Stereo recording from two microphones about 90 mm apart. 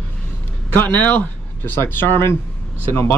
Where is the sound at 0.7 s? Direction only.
15° left (ahead or behind).